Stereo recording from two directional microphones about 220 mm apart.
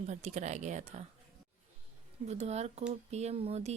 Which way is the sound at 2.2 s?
30° right (ahead or behind).